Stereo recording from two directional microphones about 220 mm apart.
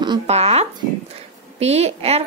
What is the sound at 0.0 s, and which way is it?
A woman's voice, 25° right (ahead or behind).